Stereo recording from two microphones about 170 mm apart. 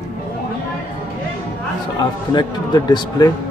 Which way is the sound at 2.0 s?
25° left (ahead or behind).